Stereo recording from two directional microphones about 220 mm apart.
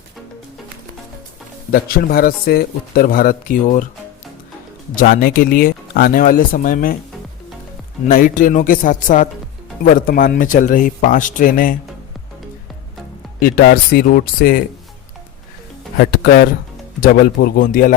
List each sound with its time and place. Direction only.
1.7 s speech: 40° left (ahead or behind)
4.9 s speech: 40° left (ahead or behind)
8.0 s speech: 40° left (ahead or behind)
13.4 s speech: 45° left (ahead or behind)
16.0 s speech: 45° left (ahead or behind)